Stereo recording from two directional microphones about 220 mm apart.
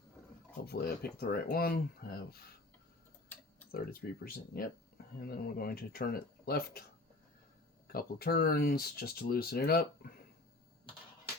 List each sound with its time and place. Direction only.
0.7 s speech: 45° left (ahead or behind)
3.8 s speech: 40° left (ahead or behind)
7.9 s speech: 40° left (ahead or behind)